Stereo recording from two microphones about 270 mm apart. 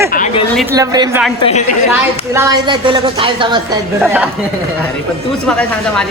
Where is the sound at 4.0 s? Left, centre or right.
Centre.